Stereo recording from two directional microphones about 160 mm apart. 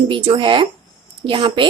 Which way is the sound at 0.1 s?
30° right (ahead or behind).